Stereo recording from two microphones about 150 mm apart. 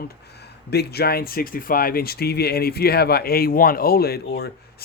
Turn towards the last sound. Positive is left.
turn(degrees=90)